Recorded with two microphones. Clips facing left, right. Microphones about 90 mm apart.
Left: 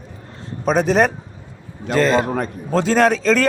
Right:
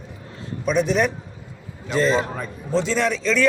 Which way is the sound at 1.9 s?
50° left (ahead or behind).